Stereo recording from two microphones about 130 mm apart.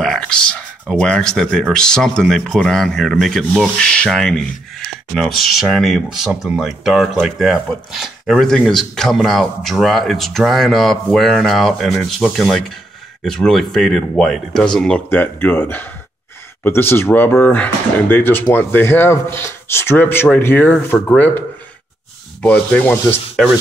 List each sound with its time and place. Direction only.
0.0 s a sound: 5° left (ahead or behind)
0.9 s speech: 5° left (ahead or behind)
22.4 s speech: 10° left (ahead or behind)